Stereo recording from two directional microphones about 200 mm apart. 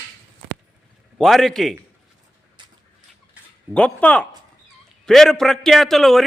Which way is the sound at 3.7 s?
5° left (ahead or behind).